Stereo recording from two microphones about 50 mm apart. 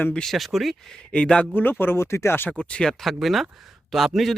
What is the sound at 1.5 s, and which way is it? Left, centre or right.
Speech, left.